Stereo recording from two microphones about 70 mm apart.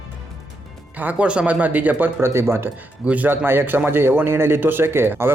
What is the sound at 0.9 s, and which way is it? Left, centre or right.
Speech, right.